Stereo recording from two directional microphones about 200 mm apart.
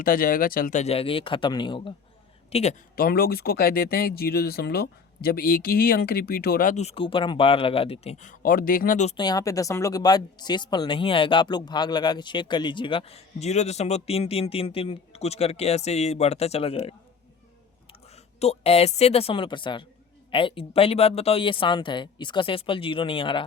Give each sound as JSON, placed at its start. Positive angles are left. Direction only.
{"t": 0.0, "sound": "speech", "side_deg": 45}
{"t": 2.9, "sound": "speech", "side_deg": 50}
{"t": 9.1, "sound": "speech", "side_deg": 20}
{"t": 18.3, "sound": "speech", "side_deg": 30}